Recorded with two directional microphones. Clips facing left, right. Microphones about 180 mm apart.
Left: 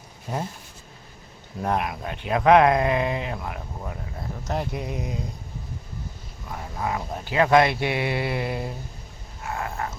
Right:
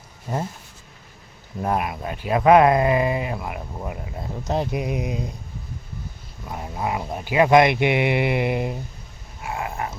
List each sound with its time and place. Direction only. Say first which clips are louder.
0.3 s speech: right 2 dB; 10° right (ahead or behind)
1.6 s speech: right 2 dB; 5° right (ahead or behind)
4.2 s speech: right 4 dB; 20° right (ahead or behind)
6.5 s speech: right 2 dB; 20° right (ahead or behind)
9.4 s a sound: right 2 dB; 15° right (ahead or behind)